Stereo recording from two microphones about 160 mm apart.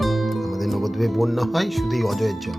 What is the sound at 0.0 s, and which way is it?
Speech, centre (ahead or behind).